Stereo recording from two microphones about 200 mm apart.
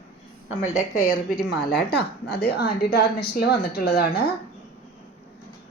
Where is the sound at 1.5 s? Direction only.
55° left (ahead or behind).